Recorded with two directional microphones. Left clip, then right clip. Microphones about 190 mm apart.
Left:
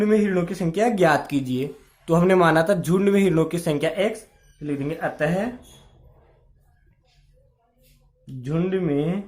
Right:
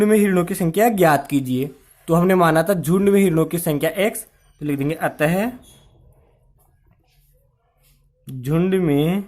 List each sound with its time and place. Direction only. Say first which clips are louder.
0.0 s speech: right 4 dB; 35° right (ahead or behind)
8.2 s speech: right 5 dB; 30° right (ahead or behind)